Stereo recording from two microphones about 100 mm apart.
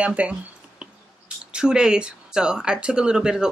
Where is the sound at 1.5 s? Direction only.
10° right (ahead or behind).